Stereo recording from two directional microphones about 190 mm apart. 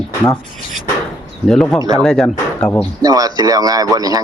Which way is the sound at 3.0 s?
20° right (ahead or behind).